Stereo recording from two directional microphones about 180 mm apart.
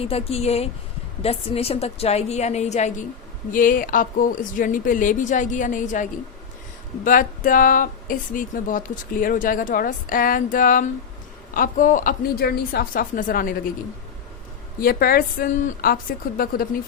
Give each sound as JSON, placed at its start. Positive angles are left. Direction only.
{"t": 0.0, "sound": "a woman's voice", "side_deg": 35}
{"t": 14.8, "sound": "a woman's voice", "side_deg": 55}